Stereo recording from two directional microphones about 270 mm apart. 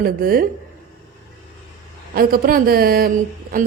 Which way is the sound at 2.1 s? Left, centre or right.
Right.